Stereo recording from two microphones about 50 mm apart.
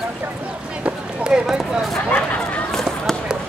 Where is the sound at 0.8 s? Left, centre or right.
Centre.